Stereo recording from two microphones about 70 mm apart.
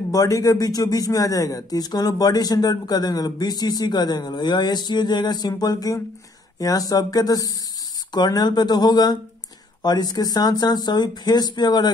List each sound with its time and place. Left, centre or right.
0.1 s speech: left
8.1 s speech: left